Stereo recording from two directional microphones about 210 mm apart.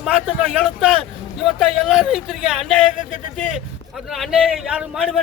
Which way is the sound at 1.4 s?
Centre (ahead or behind).